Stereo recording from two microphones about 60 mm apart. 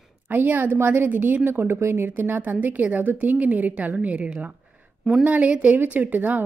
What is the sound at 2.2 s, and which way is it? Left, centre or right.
Speech, right.